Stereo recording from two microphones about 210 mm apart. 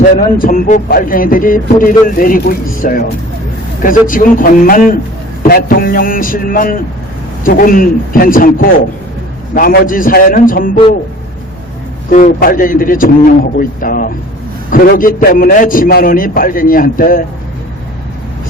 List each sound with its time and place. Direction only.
0.2 s speech: 40° left (ahead or behind)
5.4 s a sound: 45° left (ahead or behind)
7.4 s speech: 45° left (ahead or behind)
9.6 s speech: 40° left (ahead or behind)
12.1 s speech: 40° left (ahead or behind)